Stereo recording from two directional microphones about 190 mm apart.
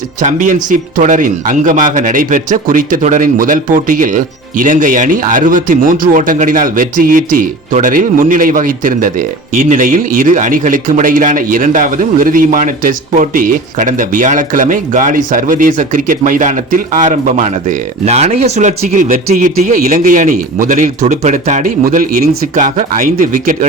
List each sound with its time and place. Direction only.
0.2 s speech: 45° right (ahead or behind)